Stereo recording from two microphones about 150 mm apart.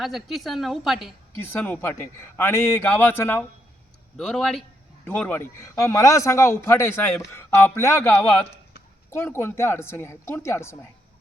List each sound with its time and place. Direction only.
0.0 s a woman's voice: centre (ahead or behind)
1.4 s speech: 10° left (ahead or behind)
4.2 s a woman's voice: 5° left (ahead or behind)